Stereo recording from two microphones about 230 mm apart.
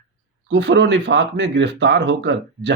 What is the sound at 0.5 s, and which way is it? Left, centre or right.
Speech, right.